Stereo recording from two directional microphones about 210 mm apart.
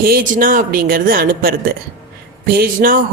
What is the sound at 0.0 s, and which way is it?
A woman's voice, 45° right (ahead or behind).